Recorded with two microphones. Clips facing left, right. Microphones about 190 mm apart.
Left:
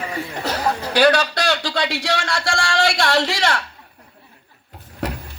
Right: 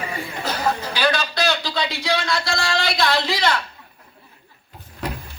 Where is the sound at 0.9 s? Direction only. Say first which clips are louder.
Left 6 dB; 75° left (ahead or behind).